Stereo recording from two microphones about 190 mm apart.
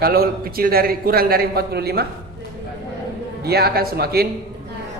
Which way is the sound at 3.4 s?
55° right (ahead or behind).